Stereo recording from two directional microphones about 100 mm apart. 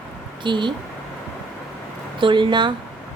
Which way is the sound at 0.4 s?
50° right (ahead or behind).